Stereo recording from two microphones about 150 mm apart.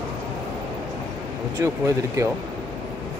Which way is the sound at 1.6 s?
20° right (ahead or behind).